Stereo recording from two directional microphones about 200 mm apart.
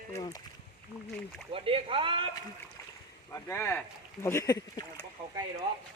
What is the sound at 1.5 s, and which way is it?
Speech, 25° right (ahead or behind).